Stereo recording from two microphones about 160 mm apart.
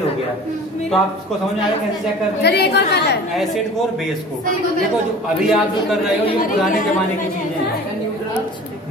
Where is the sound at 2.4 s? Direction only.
90° left.